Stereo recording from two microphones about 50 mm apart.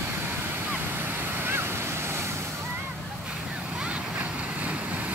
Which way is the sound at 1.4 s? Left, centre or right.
Right.